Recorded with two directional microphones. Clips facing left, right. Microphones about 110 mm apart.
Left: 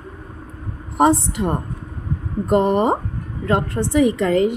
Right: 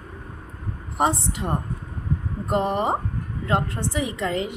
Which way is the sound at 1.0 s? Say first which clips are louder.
Left 7 dB; 50° left (ahead or behind).